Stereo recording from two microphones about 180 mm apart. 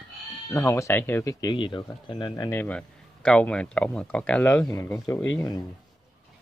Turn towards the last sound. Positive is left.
turn(degrees=20)  # may be behind; listen again after turning